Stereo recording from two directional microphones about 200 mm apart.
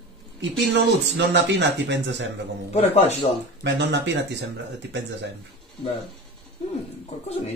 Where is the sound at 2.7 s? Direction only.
30° left (ahead or behind).